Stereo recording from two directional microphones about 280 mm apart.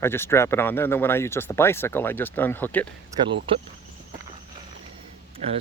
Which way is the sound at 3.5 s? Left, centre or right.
Centre.